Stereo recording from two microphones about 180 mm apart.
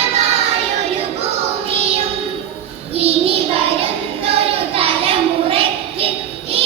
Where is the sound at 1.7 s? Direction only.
35° right (ahead or behind).